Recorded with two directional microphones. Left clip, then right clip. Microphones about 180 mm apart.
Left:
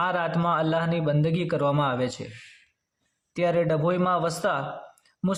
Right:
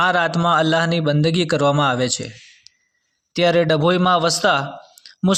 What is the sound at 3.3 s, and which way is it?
A man's voice, 20° right (ahead or behind).